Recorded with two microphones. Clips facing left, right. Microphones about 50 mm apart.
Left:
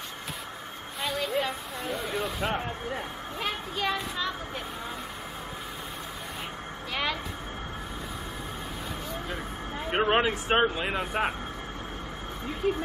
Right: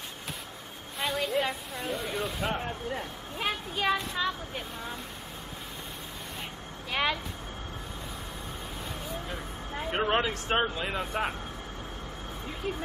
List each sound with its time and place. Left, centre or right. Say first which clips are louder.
1.0 s speech: even; centre
3.3 s a child's voice: right 1 dB; centre
6.9 s speech: right 2 dB; centre
9.8 s speech: left 3 dB; left
12.6 s a child's voice: left 7 dB; centre